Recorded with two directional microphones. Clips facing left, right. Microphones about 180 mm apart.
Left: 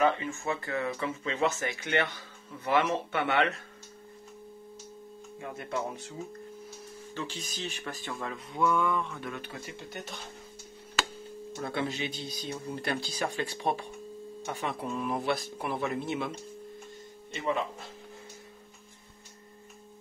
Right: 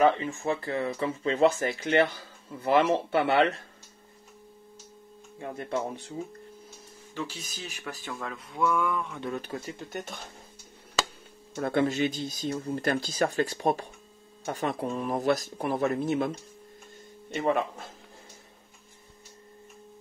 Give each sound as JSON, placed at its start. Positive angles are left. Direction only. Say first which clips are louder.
{"t": 0.0, "sound": "speech", "louder": "right 4 dB", "side_deg": -35}
{"t": 5.4, "sound": "speech", "louder": "right 3 dB", "side_deg": -35}
{"t": 7.2, "sound": "speech", "louder": "right 1 dB", "side_deg": -10}
{"t": 9.2, "sound": "speech", "louder": "right 5 dB", "side_deg": -40}
{"t": 11.5, "sound": "speech", "louder": "right 7 dB", "side_deg": -50}
{"t": 17.3, "sound": "speech", "louder": "right 5 dB", "side_deg": -55}